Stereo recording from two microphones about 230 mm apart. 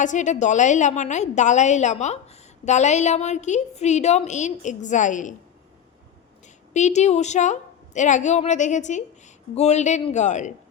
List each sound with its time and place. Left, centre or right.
0.0 s a woman's voice: left
6.7 s a woman's voice: left